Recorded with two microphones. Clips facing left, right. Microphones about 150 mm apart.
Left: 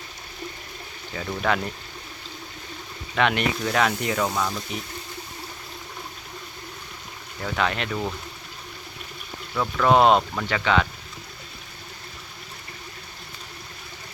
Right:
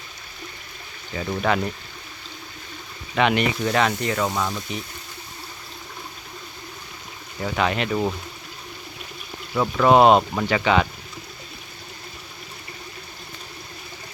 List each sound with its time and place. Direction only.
1.1 s speech: 5° right (ahead or behind)
3.2 s speech: centre (ahead or behind)
7.4 s speech: 5° right (ahead or behind)
9.6 s speech: 15° right (ahead or behind)
9.9 s speech: 5° right (ahead or behind)